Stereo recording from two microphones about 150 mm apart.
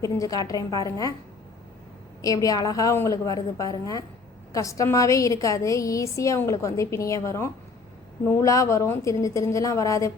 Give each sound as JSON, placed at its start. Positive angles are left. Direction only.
{"t": 0.0, "sound": "a woman's voice", "side_deg": 25}
{"t": 2.2, "sound": "a woman's voice", "side_deg": 25}